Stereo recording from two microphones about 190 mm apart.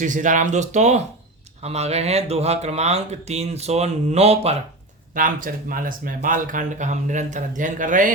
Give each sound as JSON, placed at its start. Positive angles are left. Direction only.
{"t": 0.0, "sound": "speech", "side_deg": -40}
{"t": 5.1, "sound": "speech", "side_deg": -45}